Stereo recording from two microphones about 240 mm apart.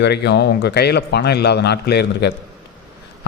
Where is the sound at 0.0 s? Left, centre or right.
Left.